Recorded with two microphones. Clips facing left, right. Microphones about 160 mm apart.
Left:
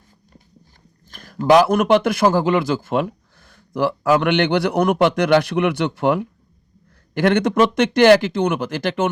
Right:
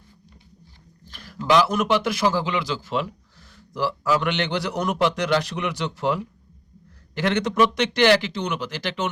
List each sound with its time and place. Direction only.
1.0 s a man's voice: 45° left (ahead or behind)